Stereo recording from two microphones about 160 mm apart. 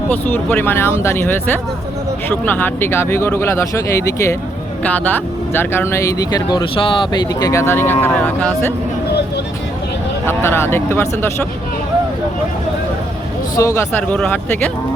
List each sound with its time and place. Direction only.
0.1 s speech: 10° left (ahead or behind)
10.2 s speech: 15° left (ahead or behind)
13.6 s speech: 20° left (ahead or behind)